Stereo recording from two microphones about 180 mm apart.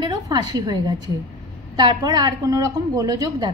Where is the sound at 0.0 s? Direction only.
25° right (ahead or behind).